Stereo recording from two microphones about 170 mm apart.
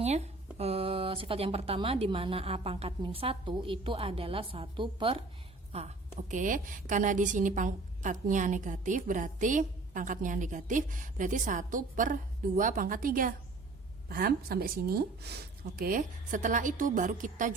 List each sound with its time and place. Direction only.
0.0 s a woman's voice: 40° right (ahead or behind); by 15.4 s 70° right (ahead or behind)
15.8 s a woman's voice: 50° right (ahead or behind)